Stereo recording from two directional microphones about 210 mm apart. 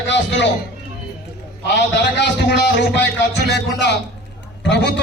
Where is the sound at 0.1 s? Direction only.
55° left (ahead or behind).